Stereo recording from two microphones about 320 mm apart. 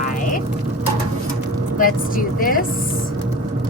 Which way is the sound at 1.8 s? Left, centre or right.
Left.